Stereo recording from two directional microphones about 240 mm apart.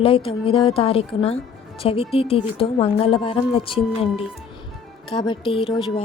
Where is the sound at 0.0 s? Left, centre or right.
Left.